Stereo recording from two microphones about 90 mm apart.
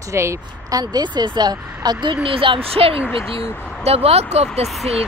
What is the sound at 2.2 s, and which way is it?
Speech, 90° right.